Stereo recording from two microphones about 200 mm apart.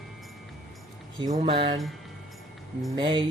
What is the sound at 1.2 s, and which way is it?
Speech, 25° right (ahead or behind).